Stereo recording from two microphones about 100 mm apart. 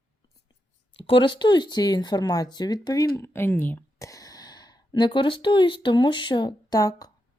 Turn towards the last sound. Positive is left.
turn(degrees=40)  # may be behind; listen again after turning